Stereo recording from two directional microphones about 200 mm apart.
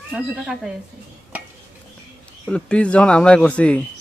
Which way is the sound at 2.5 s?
5° left (ahead or behind).